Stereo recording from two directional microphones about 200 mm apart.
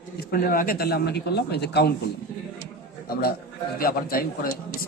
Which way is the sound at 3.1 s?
50° left (ahead or behind).